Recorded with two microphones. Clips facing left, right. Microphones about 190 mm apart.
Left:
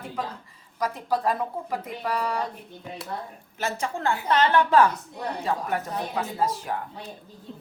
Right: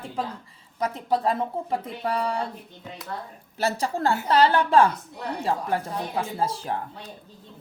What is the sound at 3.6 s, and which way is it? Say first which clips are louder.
A woman's voice: right 4 dB; 35° right (ahead or behind).